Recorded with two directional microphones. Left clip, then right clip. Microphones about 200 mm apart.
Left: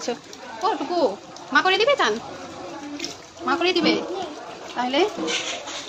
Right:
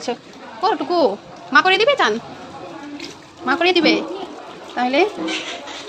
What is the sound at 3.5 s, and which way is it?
Speech, 35° right (ahead or behind).